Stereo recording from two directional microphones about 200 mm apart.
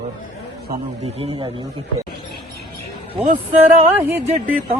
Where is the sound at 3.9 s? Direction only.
10° right (ahead or behind).